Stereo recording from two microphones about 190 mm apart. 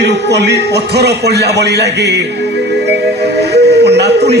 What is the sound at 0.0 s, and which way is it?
A man's voice, 65° right (ahead or behind).